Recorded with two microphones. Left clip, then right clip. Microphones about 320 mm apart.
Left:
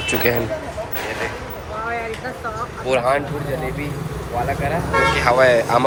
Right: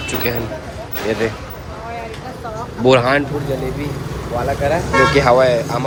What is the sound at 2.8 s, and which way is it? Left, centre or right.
Speech, right.